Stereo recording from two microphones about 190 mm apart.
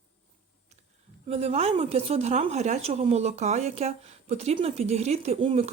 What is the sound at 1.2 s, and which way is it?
Speech, 30° right (ahead or behind).